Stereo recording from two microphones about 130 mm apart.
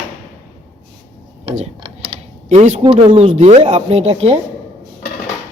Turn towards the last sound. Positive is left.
turn(degrees=-50)  # may be behind; listen again after turning